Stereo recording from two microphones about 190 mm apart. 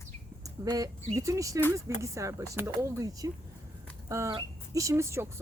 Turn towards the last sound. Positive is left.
turn(degrees=-15)  # may be behind; listen again after turning